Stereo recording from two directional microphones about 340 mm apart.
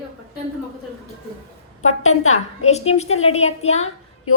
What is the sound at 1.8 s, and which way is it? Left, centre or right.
Speech, left.